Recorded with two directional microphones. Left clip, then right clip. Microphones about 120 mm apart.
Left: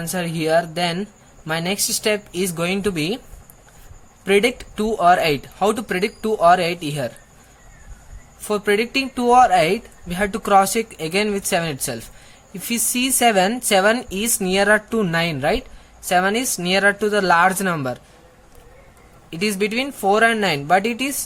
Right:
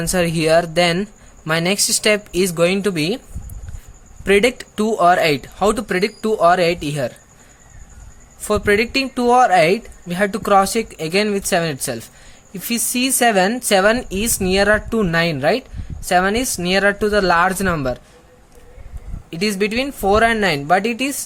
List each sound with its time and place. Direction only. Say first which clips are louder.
0.0 s speech: right 6 dB; 60° right (ahead or behind); by 3.2 s 35° right (ahead or behind)
4.3 s speech: right 2 dB; 40° right (ahead or behind)
8.4 s speech: right 3 dB; 45° right (ahead or behind)
19.3 s speech: right 2 dB; 30° right (ahead or behind)